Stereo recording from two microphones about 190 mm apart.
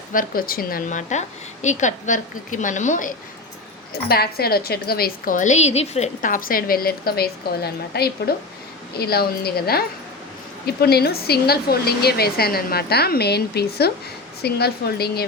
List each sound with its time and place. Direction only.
0.1 s a woman's voice: 50° left (ahead or behind)
4.1 s a woman's voice: 55° left (ahead or behind)